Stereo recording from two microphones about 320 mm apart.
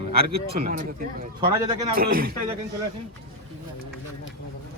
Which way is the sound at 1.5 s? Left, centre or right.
Centre.